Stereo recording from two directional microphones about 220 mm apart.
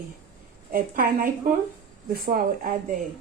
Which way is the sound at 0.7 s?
40° right (ahead or behind).